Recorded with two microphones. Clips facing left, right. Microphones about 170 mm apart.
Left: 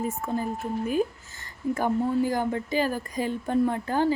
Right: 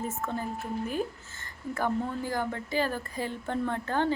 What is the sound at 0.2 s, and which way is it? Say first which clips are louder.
Speech: left 4 dB; 10° left (ahead or behind).